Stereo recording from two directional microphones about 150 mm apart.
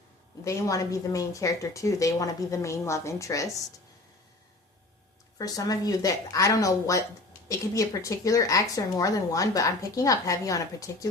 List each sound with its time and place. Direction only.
0.4 s a woman's voice: 20° left (ahead or behind)
5.4 s a woman's voice: 25° left (ahead or behind)